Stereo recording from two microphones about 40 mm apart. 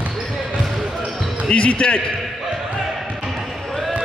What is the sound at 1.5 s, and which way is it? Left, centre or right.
Speech, left.